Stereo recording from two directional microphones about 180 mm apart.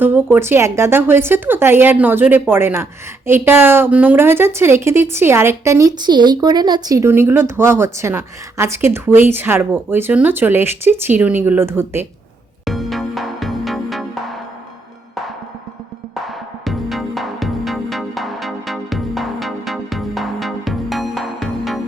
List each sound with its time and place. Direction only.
0.0 s a woman's voice: 10° right (ahead or behind)
12.6 s music: centre (ahead or behind)
16.6 s music: centre (ahead or behind)